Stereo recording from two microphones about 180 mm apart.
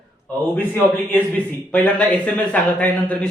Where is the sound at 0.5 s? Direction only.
10° left (ahead or behind).